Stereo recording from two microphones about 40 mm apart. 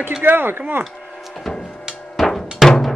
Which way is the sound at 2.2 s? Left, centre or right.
Centre.